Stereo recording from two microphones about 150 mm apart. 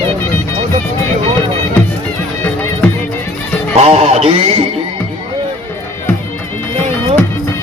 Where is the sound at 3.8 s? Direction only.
45° right (ahead or behind).